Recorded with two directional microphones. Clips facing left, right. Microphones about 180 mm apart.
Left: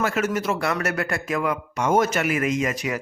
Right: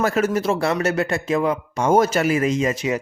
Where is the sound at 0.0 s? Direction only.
35° right (ahead or behind).